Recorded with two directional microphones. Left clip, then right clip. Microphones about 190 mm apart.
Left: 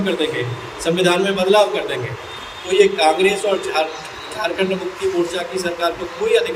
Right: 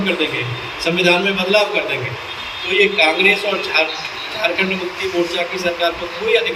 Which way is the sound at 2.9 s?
15° left (ahead or behind).